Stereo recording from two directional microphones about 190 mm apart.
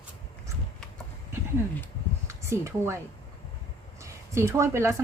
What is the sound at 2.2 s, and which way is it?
Speech, 15° right (ahead or behind).